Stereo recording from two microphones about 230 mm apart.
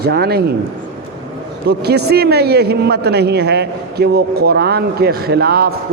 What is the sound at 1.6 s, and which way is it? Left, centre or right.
A man's voice, right.